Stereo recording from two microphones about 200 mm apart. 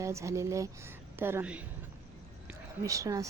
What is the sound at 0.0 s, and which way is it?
A woman's voice, 15° right (ahead or behind).